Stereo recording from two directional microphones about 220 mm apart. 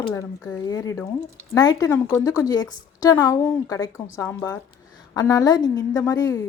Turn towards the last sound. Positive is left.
turn(degrees=15)  # may be behind; listen again after turning